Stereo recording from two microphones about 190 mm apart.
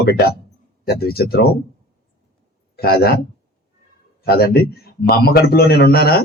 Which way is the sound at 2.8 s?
55° left (ahead or behind).